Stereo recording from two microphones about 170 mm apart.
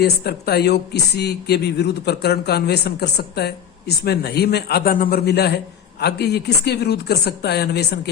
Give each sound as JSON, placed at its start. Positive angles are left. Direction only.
{"t": 0.0, "sound": "speech", "side_deg": 70}